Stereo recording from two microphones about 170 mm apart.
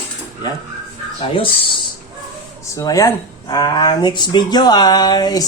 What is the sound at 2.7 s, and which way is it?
Speech, 20° left (ahead or behind).